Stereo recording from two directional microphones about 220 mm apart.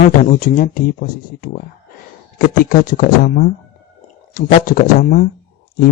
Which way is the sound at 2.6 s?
40° left (ahead or behind).